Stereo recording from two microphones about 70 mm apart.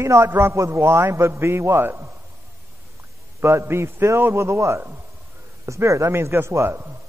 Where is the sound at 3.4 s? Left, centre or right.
Right.